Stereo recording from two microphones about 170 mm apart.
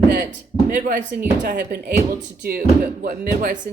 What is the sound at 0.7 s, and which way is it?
Speech, 50° right (ahead or behind).